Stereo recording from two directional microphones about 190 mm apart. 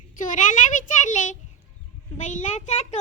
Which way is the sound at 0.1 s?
45° left (ahead or behind).